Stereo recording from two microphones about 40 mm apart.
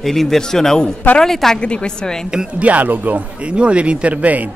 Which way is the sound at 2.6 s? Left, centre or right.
Right.